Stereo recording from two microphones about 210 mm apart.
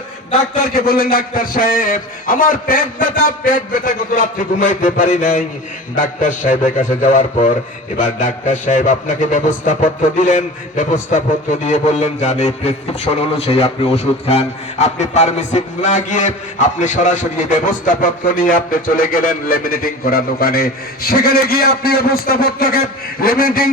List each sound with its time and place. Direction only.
0.6 s a man's voice: 45° left (ahead or behind)